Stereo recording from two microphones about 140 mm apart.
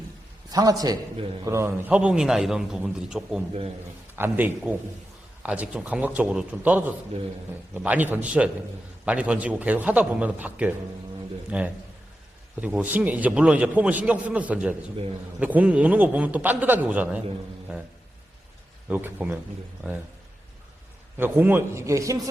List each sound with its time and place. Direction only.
0.5 s a man's voice: 25° right (ahead or behind); by 3.4 s 5° right (ahead or behind)
4.1 s a man's voice: 15° right (ahead or behind)
18.9 s a man's voice: 10° right (ahead or behind)
21.2 s a man's voice: 15° right (ahead or behind)